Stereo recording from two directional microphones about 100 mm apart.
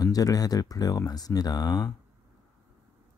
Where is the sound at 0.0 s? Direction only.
35° left (ahead or behind).